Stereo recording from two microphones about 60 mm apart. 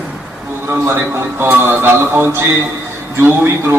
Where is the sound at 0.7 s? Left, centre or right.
Right.